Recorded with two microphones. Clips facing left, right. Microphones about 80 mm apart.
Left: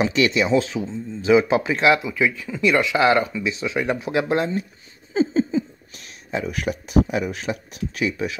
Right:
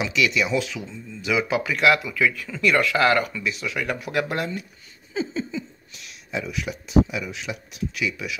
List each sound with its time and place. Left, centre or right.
0.0 s speech: left